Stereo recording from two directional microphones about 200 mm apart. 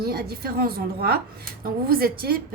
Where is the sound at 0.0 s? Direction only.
50° right (ahead or behind).